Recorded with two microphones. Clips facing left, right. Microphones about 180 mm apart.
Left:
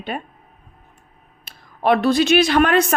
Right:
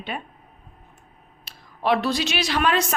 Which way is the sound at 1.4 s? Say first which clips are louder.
Left 5 dB; 55° left (ahead or behind).